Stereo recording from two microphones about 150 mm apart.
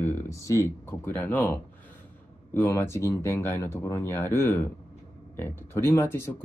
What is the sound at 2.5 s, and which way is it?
Speech, 15° left (ahead or behind).